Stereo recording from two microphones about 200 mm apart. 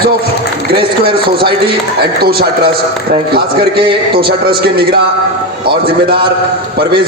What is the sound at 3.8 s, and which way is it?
Speech, 25° right (ahead or behind).